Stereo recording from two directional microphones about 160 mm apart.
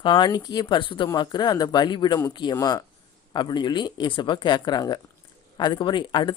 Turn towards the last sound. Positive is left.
turn(degrees=30)  # may be behind; listen again after turning